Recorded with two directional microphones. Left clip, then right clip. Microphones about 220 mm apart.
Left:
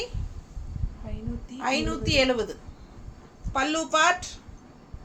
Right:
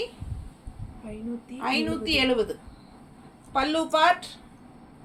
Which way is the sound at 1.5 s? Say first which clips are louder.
Even; 20° left (ahead or behind).